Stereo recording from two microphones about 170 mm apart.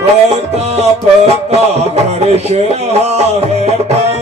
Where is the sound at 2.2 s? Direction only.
40° right (ahead or behind).